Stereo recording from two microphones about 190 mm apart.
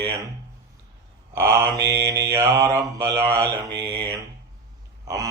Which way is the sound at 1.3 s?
15° right (ahead or behind).